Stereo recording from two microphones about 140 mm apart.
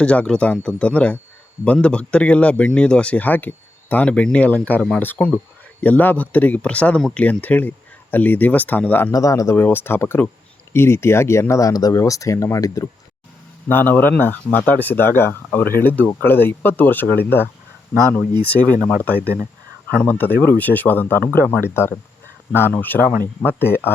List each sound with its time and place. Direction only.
0.0 s speech: 10° left (ahead or behind)
9.1 s speech: 25° left (ahead or behind)
13.7 s speech: 15° left (ahead or behind)
18.5 s speech: 10° left (ahead or behind)